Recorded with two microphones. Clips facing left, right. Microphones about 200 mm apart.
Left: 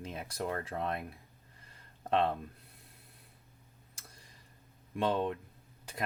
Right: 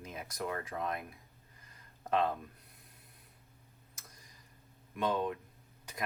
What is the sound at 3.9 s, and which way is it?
Tick-tock, 30° left (ahead or behind).